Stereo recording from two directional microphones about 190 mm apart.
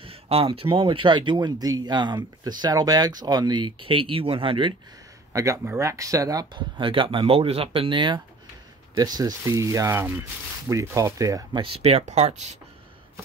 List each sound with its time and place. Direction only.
0.0 s speech: 30° right (ahead or behind)
5.3 s speech: 15° right (ahead or behind); by 12.4 s 35° right (ahead or behind)